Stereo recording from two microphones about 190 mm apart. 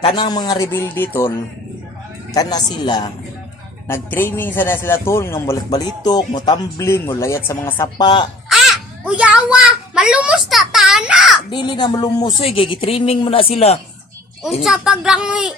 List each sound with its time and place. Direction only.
0.0 s a man's voice: 25° left (ahead or behind)
2.3 s a man's voice: 20° left (ahead or behind)
8.4 s a child's voice: centre (ahead or behind)
11.5 s speech: 25° left (ahead or behind)
14.4 s a woman's voice: 5° right (ahead or behind)